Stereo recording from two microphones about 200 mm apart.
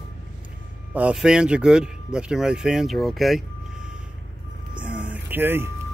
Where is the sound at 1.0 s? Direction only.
5° right (ahead or behind).